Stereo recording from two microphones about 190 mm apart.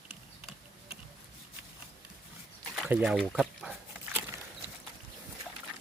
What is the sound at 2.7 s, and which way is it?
Speech, 5° right (ahead or behind).